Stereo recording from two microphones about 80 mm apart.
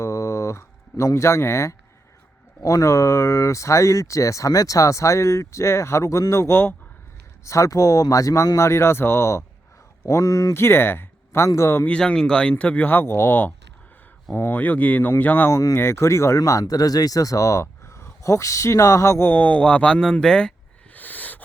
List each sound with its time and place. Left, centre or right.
0.0 s a sound: left
2.6 s speech: left
7.4 s speech: left
11.9 s speech: centre
15.5 s speech: left
19.3 s speech: centre
20.9 s a sound: left